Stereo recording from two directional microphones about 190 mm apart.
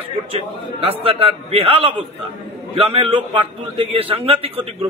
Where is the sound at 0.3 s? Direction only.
30° right (ahead or behind).